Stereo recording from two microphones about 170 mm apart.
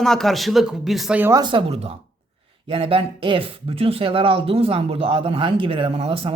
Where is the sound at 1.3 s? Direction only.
30° right (ahead or behind).